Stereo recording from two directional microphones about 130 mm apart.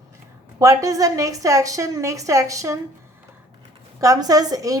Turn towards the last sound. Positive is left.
turn(degrees=-25)  # may be behind; listen again after turning